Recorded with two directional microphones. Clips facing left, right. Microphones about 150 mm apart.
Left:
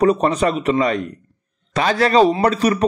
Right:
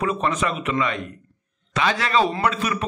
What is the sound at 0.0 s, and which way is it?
A man's voice, 40° left (ahead or behind).